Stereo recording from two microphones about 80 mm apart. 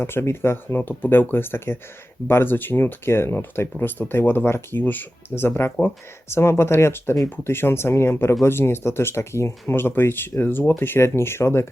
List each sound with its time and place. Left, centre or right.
0.0 s speech: left